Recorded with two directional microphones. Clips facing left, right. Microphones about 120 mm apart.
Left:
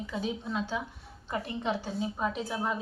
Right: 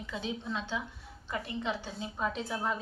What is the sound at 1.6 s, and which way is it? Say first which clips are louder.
Speech: left 6 dB; 15° left (ahead or behind).